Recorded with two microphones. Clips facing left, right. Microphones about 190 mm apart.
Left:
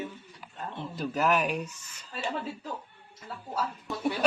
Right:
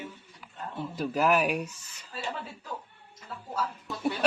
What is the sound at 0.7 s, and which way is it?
Speech, 5° right (ahead or behind).